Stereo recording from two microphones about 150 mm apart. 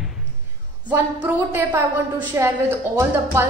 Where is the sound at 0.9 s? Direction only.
10° right (ahead or behind).